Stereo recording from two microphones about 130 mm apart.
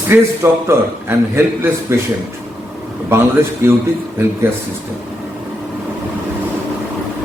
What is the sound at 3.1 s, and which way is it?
Speech, 20° right (ahead or behind).